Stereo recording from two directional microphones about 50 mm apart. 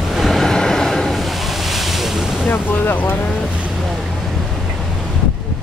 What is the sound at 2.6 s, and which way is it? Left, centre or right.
Speech, left.